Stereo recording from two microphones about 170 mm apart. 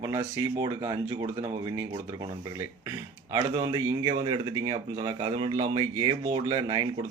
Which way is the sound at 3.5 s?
25° right (ahead or behind).